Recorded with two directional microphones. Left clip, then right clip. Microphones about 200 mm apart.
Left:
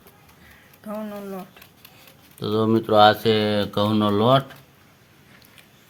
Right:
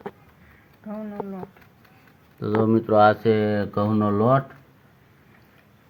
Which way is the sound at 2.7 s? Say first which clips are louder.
Left 2 dB; centre (ahead or behind).